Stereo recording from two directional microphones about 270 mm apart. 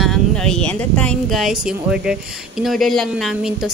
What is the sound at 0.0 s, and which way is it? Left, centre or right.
Speech, centre.